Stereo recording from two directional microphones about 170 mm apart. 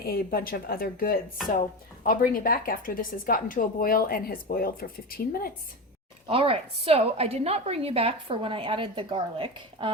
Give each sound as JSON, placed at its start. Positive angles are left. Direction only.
{"t": 0.0, "sound": "a woman's voice", "side_deg": 65}
{"t": 6.2, "sound": "a woman's voice", "side_deg": -30}